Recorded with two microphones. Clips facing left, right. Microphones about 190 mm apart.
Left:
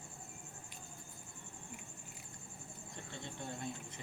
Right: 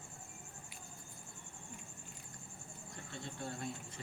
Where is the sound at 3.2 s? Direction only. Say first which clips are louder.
Right 1 dB; 20° left (ahead or behind).